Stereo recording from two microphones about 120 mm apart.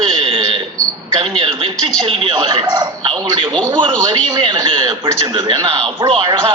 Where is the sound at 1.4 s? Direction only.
50° right (ahead or behind).